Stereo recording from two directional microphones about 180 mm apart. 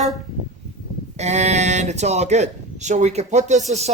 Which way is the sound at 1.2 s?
40° right (ahead or behind).